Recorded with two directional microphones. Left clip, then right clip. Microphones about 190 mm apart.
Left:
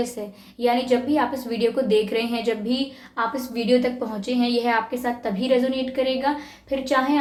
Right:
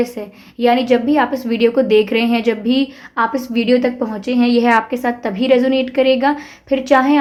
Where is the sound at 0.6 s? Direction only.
45° right (ahead or behind).